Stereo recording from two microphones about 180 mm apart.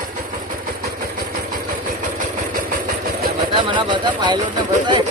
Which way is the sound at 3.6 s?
25° right (ahead or behind).